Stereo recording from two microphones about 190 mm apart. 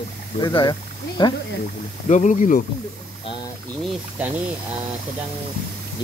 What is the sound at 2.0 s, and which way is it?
Speech, 40° left (ahead or behind).